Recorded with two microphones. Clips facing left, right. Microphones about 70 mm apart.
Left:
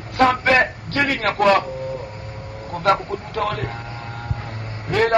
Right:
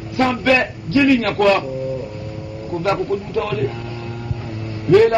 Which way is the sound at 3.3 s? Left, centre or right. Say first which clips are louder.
Left 1 dB; left.